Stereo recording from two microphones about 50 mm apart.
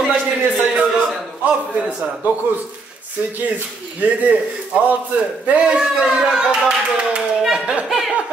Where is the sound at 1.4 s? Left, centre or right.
Right.